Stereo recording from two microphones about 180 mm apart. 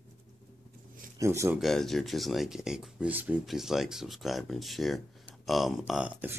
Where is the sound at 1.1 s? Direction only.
15° right (ahead or behind).